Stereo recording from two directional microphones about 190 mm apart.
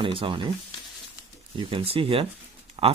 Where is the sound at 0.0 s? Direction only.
25° right (ahead or behind).